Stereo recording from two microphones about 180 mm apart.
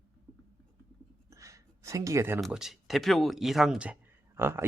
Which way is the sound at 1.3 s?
15° right (ahead or behind).